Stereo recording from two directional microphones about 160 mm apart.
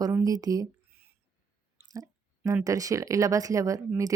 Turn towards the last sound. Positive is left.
turn(degrees=-20)  # may be behind; listen again after turning